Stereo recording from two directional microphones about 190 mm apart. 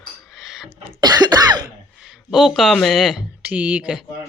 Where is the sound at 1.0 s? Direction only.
20° right (ahead or behind).